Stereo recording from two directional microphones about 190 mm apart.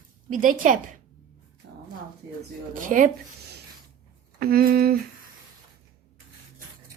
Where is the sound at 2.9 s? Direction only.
40° right (ahead or behind).